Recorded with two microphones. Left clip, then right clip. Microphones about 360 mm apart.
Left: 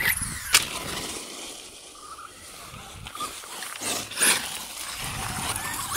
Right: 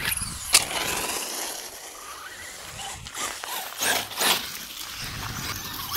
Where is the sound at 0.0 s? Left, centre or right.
Centre.